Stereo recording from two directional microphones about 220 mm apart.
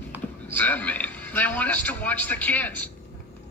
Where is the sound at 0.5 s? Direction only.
5° left (ahead or behind).